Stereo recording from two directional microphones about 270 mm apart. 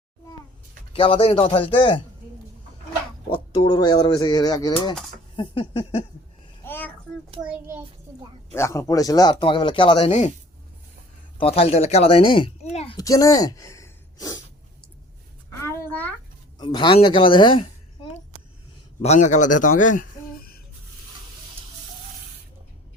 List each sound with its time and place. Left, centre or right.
0.9 s speech: centre
3.6 s speech: centre
6.7 s a sound: centre
7.4 s a child's voice: centre
8.5 s speech: centre; by 10.3 s left
11.3 s a woman's voice: left
15.4 s a sound: centre
16.6 s a woman's voice: centre
19.8 s a sound: left